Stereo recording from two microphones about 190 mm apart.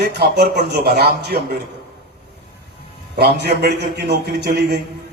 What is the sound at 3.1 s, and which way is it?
A man's voice, 60° right (ahead or behind).